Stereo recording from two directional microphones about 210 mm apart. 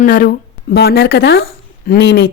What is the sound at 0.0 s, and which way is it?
A woman's voice, 45° left (ahead or behind).